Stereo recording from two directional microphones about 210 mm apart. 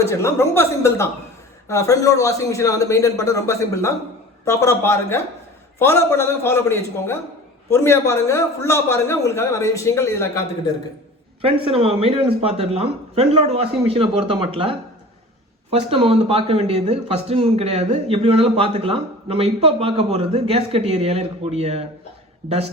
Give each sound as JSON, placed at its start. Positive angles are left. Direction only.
{"t": 0.0, "sound": "a man's voice", "side_deg": 15}
{"t": 11.4, "sound": "speech", "side_deg": -25}